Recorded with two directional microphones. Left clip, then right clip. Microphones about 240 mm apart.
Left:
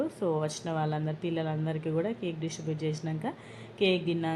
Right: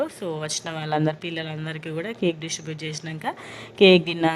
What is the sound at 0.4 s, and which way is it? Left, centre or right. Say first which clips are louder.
A woman's voice: right 3 dB; right.